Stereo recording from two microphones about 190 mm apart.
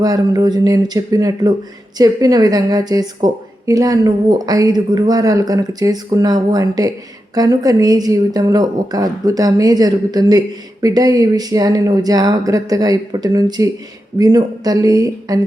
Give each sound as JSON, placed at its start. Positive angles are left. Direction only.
{"t": 0.0, "sound": "a woman's voice", "side_deg": -20}